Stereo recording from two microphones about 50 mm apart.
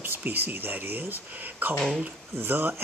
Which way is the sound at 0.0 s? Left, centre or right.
Right.